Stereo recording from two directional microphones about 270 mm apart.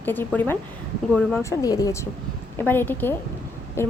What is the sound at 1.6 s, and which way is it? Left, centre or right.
Speech, centre.